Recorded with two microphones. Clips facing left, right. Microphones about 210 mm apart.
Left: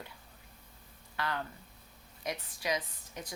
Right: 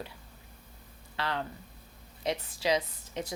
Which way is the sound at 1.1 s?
25° right (ahead or behind).